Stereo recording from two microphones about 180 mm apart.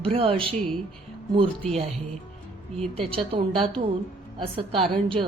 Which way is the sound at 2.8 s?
30° right (ahead or behind).